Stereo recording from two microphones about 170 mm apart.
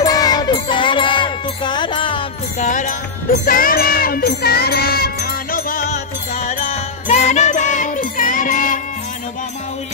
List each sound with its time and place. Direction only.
0.0 s music: 20° left (ahead or behind)
2.6 s music: 45° left (ahead or behind)